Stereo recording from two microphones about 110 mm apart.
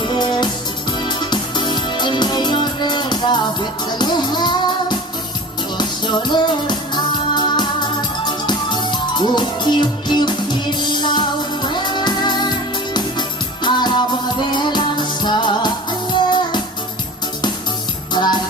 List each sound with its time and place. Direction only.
0.1 s music: 45° left (ahead or behind)
6.2 s music: 40° left (ahead or behind)
18.1 s music: 40° left (ahead or behind)